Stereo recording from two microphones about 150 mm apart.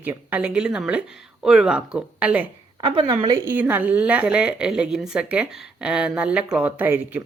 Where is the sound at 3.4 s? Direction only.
10° right (ahead or behind).